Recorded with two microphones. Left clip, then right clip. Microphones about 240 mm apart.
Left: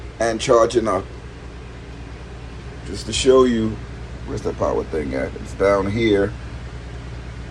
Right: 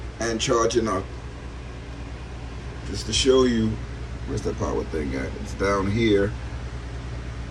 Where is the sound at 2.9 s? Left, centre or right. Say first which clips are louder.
Left 4 dB; centre.